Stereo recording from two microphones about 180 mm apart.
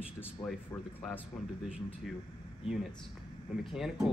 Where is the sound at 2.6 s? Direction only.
Centre (ahead or behind).